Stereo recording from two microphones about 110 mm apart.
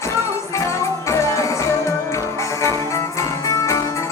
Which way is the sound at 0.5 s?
25° left (ahead or behind).